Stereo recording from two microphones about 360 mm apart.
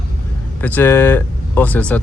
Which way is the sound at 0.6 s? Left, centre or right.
Centre.